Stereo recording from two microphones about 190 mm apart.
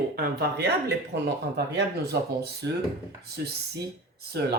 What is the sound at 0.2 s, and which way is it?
Speech, 60° right (ahead or behind).